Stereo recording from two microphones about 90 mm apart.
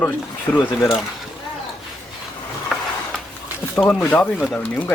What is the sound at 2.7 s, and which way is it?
Mechanisms, centre (ahead or behind).